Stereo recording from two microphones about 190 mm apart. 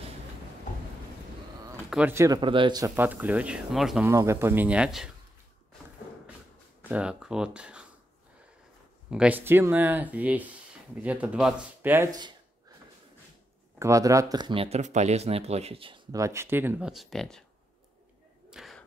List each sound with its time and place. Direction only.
1.9 s speech: 10° right (ahead or behind)
3.0 s speech: 10° right (ahead or behind)
4.0 s speech: 15° right (ahead or behind)
6.8 s speech: 5° right (ahead or behind)
9.1 s speech: 5° right (ahead or behind)
13.7 s speech: 15° right (ahead or behind); by 17.5 s centre (ahead or behind)
18.5 s a sound: centre (ahead or behind)